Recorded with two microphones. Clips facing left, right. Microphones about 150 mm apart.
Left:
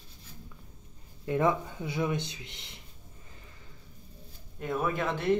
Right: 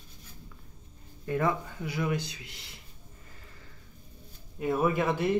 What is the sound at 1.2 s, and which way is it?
Speech, 20° left (ahead or behind).